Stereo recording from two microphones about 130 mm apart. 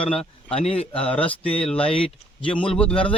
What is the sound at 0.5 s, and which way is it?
Speech, 50° left (ahead or behind).